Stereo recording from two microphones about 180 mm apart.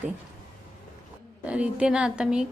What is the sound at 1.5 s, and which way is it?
A woman's voice, 5° right (ahead or behind).